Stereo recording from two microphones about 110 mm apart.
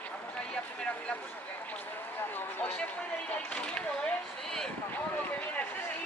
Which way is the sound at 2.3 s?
15° left (ahead or behind).